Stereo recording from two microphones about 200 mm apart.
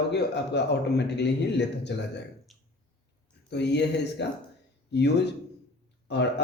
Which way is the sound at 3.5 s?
60° left (ahead or behind).